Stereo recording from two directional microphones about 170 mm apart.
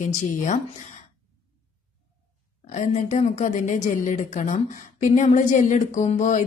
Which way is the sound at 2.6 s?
45° left (ahead or behind).